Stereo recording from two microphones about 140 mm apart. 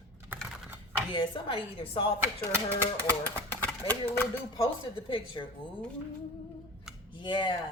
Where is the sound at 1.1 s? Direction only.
35° left (ahead or behind).